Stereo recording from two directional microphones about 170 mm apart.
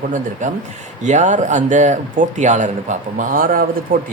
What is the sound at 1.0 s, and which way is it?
A man's voice, 45° right (ahead or behind).